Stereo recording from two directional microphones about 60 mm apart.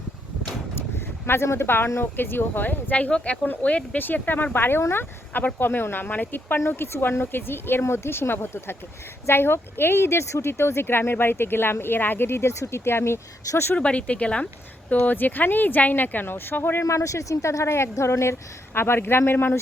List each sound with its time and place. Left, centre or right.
0.8 s a sound: left
2.0 s speech: left
6.7 s speech: left
13.7 s speech: centre
14.9 s speech: left
16.8 s speech: left